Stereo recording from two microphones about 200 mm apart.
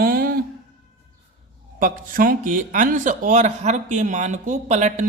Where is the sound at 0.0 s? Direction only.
45° right (ahead or behind).